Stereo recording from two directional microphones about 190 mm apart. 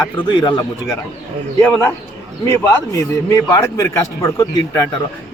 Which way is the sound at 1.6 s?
10° left (ahead or behind).